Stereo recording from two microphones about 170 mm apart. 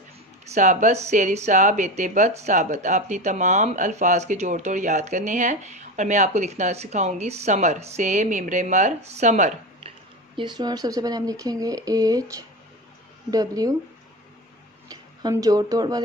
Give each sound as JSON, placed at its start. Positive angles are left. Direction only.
{"t": 0.6, "sound": "speech", "side_deg": -45}
{"t": 10.3, "sound": "speech", "side_deg": -25}
{"t": 13.3, "sound": "speech", "side_deg": -20}
{"t": 14.9, "sound": "speech", "side_deg": -20}